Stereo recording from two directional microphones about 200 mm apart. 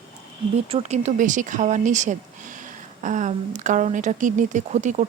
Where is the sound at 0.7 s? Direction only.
35° right (ahead or behind).